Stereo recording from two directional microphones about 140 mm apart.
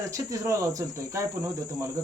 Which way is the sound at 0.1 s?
20° right (ahead or behind).